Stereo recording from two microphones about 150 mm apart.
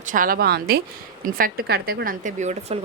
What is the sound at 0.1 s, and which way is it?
Speech, 70° right (ahead or behind).